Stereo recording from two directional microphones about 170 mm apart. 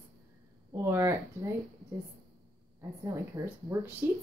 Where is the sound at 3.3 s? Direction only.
20° right (ahead or behind).